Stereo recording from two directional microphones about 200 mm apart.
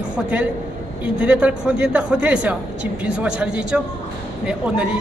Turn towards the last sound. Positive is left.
turn(degrees=-5)  # may be behind; listen again after turning